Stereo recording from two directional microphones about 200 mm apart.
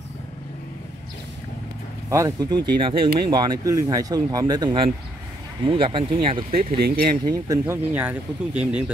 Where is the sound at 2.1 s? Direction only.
15° right (ahead or behind).